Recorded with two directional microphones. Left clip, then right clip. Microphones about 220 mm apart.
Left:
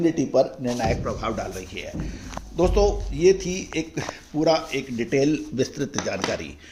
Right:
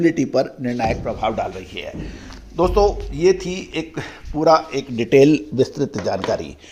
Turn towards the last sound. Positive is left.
turn(degrees=-15)  # may be behind; listen again after turning